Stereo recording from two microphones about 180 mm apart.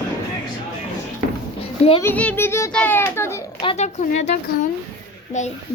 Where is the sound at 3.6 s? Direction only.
35° left (ahead or behind).